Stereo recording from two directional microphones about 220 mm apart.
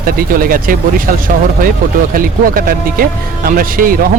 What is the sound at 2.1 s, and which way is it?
Speech, 40° right (ahead or behind).